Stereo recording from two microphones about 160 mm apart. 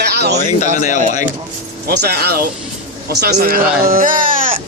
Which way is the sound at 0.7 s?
45° left (ahead or behind).